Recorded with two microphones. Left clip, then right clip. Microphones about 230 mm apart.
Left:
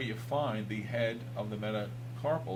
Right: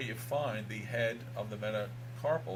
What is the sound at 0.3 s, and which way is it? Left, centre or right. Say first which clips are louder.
Speech: left 1 dB; right.